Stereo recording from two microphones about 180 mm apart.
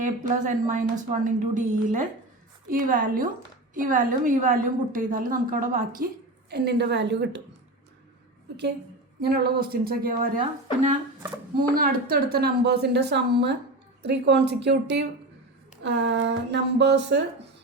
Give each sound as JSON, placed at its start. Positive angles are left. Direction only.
{"t": 0.0, "sound": "a woman's voice", "side_deg": -45}
{"t": 6.5, "sound": "a woman's voice", "side_deg": -65}
{"t": 9.2, "sound": "speech", "side_deg": -60}
{"t": 11.7, "sound": "a woman's voice", "side_deg": -55}
{"t": 15.8, "sound": "a woman's voice", "side_deg": -90}